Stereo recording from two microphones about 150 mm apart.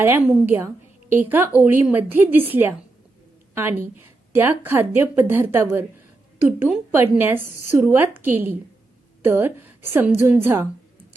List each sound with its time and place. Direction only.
0.0 s a woman's voice: 15° right (ahead or behind)
6.9 s a woman's voice: 15° right (ahead or behind)